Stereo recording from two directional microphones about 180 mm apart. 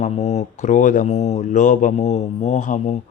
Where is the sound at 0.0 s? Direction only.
40° left (ahead or behind).